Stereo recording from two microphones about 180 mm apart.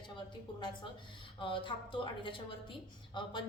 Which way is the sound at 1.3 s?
30° left (ahead or behind).